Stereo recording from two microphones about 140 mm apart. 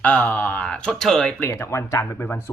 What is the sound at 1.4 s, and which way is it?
Speech, 20° left (ahead or behind).